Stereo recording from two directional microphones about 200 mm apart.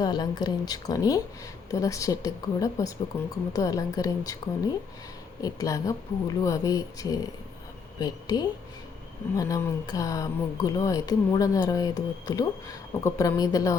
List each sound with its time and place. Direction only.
0.0 s a woman's voice: 20° left (ahead or behind)